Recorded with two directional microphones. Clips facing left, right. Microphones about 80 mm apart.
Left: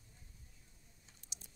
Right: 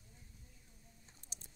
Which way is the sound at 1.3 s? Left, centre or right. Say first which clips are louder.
Even; right.